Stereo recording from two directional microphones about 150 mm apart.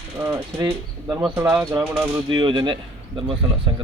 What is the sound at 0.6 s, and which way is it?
Speech, 25° right (ahead or behind).